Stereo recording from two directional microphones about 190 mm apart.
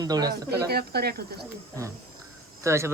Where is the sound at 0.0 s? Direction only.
20° right (ahead or behind).